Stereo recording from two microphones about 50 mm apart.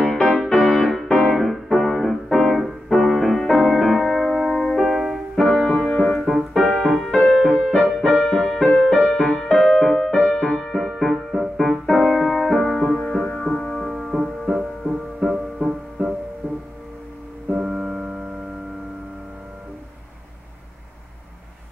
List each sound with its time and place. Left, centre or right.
0.1 s music: centre
5.7 s music: centre
6.1 s music: centre
10.7 s music: centre
13.9 s music: centre
16.4 s music: right
17.6 s music: centre